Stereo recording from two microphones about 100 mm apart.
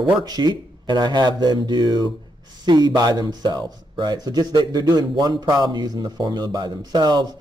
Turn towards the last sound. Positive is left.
turn(degrees=-45)  # may be behind; listen again after turning